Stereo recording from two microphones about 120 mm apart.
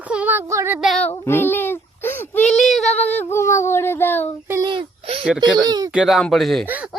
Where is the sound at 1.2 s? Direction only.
20° left (ahead or behind).